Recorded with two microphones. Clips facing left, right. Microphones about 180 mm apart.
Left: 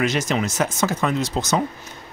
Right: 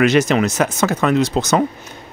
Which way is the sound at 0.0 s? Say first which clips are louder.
Right 7 dB; 65° right (ahead or behind).